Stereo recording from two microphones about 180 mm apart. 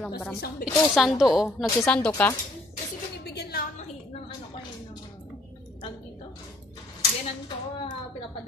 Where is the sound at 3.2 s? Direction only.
65° left (ahead or behind).